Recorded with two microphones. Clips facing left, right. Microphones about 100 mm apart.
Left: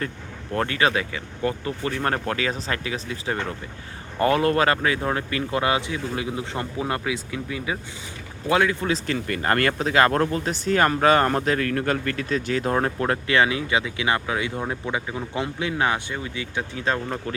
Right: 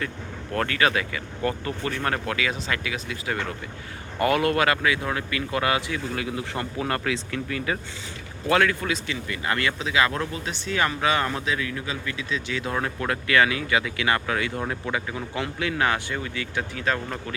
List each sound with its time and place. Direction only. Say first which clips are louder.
0.5 s speech: left 1 dB; 25° left (ahead or behind)
2.0 s speech: left 2 dB; 35° left (ahead or behind)
9.1 s speech: left 5 dB; 50° left (ahead or behind); by 17.3 s 25° left (ahead or behind)